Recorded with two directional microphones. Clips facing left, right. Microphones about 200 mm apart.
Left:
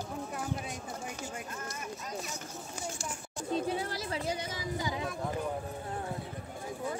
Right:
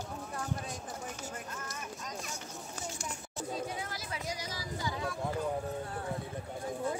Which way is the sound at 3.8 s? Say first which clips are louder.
Left 5 dB; 30° left (ahead or behind).